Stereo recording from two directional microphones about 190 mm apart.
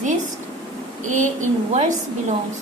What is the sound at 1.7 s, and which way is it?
Speech, 40° right (ahead or behind).